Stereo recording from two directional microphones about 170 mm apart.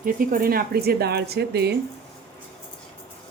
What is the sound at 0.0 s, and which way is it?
Speech, 55° right (ahead or behind).